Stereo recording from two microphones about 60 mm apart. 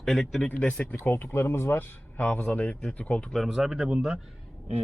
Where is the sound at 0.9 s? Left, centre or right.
Left.